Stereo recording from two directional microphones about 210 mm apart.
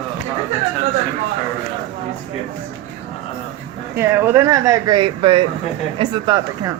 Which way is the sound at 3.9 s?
10° right (ahead or behind).